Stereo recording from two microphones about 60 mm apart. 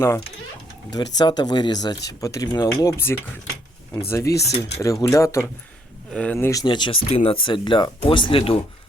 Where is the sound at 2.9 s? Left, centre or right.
Left.